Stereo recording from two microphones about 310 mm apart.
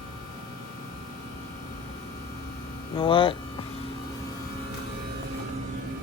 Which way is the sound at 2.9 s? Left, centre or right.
Centre.